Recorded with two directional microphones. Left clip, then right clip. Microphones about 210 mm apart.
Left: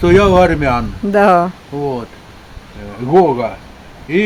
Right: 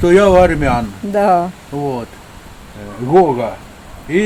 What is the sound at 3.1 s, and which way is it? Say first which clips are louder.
Speech: even; 15° left (ahead or behind).